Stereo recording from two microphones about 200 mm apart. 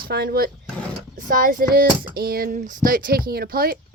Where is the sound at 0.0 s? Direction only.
50° right (ahead or behind).